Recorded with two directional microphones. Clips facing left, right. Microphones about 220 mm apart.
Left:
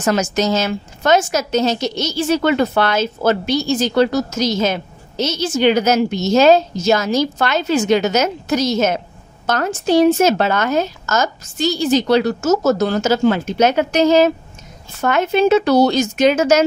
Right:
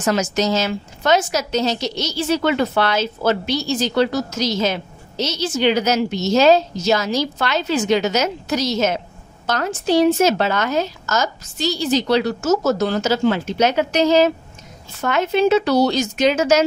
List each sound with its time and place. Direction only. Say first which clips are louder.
0.0 s a woman's voice: left 2 dB; 50° left (ahead or behind)